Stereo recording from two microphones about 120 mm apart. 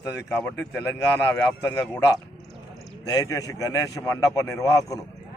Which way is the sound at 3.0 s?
30° left (ahead or behind).